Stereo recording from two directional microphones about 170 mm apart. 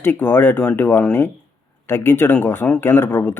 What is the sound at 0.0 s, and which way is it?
Speech, 10° left (ahead or behind).